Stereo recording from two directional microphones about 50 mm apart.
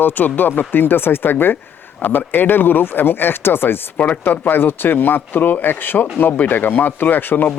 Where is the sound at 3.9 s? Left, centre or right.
Left.